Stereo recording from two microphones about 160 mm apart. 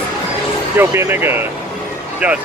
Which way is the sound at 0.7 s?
15° right (ahead or behind).